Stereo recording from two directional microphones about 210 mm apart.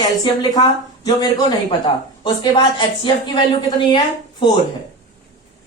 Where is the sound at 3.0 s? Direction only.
20° left (ahead or behind).